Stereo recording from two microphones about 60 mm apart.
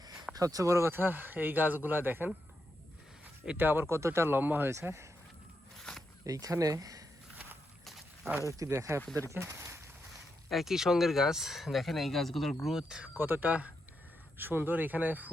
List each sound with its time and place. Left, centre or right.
0.0 s a sound: right
0.3 s speech: right
0.9 s speech: right
3.6 s speech: right
4.7 s speech: right
5.9 s walk: centre
6.2 s speech: right
7.9 s a sound: centre
8.4 s speech: right
9.3 s a sound: right
10.5 s speech: centre
13.1 s speech: right